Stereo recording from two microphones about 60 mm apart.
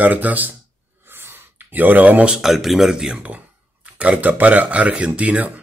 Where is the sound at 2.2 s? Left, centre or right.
Centre.